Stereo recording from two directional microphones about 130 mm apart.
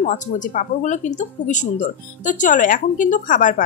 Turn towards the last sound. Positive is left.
turn(degrees=90)